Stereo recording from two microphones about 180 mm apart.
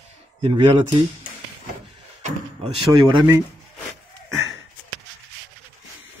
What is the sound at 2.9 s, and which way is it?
Speech, 25° right (ahead or behind).